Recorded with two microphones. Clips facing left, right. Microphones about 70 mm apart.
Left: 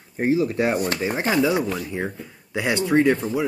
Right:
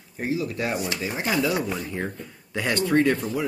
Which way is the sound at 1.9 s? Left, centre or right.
Centre.